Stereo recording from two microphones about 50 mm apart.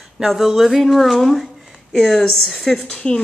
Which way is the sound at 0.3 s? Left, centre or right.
Centre.